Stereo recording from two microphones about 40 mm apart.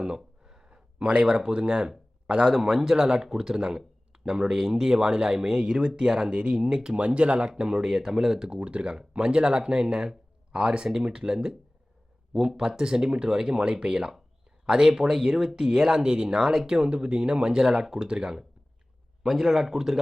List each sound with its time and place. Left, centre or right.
0.4 s speech: centre
2.5 s speech: centre
7.9 s speech: centre
8.6 s speech: right
19.2 s speech: centre